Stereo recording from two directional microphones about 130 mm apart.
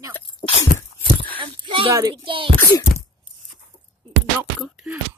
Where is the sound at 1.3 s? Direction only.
40° right (ahead or behind).